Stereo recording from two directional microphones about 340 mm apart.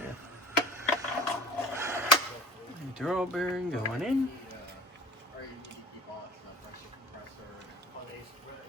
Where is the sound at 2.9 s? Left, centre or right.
Centre.